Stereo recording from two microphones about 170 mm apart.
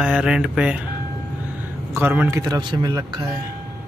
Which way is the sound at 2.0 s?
10° right (ahead or behind).